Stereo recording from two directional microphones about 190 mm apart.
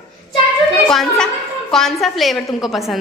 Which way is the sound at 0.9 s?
Centre (ahead or behind).